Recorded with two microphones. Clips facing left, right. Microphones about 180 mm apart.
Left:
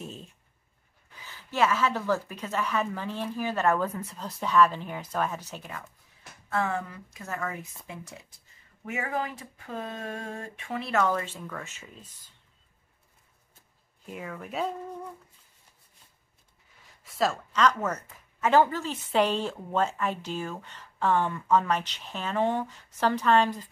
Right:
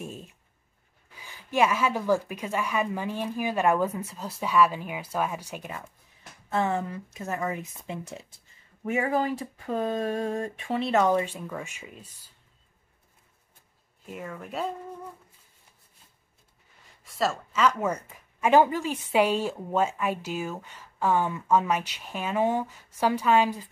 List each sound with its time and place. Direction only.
0.0 s a sound: 10° right (ahead or behind)
1.1 s speech: 10° right (ahead or behind)
14.1 s speech: centre (ahead or behind)
17.0 s speech: centre (ahead or behind)